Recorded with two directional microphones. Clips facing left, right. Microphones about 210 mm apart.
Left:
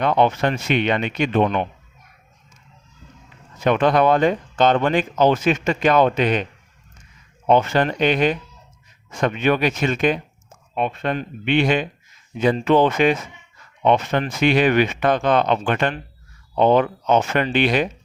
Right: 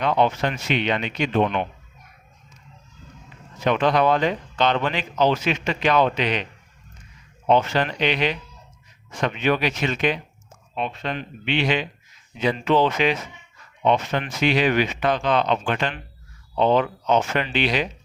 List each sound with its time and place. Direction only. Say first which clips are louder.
0.0 s speech: left 3 dB; 55° left (ahead or behind)
3.6 s speech: left 3 dB; 50° left (ahead or behind)
7.4 s speech: left 3 dB; 50° left (ahead or behind)